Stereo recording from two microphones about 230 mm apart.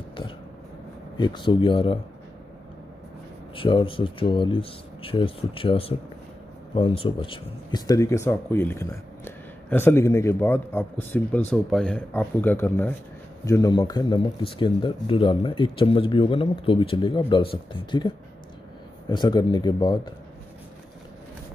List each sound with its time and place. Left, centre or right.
1.1 s speech: centre
3.5 s speech: left